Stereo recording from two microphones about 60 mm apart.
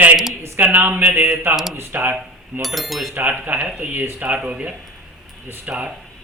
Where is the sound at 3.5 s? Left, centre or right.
Right.